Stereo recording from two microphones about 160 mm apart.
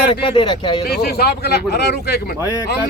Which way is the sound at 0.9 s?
75° left (ahead or behind).